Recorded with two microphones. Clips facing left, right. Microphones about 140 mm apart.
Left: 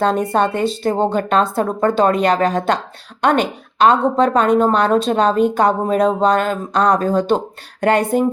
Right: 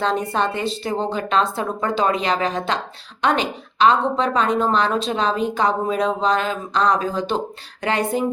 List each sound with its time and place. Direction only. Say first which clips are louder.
0.0 s a woman's voice: left 5 dB; 50° left (ahead or behind)